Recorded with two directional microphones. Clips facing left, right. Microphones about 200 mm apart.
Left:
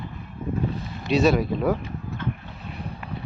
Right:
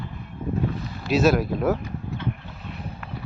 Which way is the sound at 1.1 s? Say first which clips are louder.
Even; centre (ahead or behind).